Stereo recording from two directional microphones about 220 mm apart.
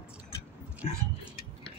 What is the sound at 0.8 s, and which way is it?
Speech, 30° left (ahead or behind).